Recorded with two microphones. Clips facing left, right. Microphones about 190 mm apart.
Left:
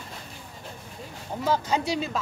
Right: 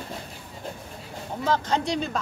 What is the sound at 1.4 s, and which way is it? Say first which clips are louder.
Speech: even; 5° left (ahead or behind).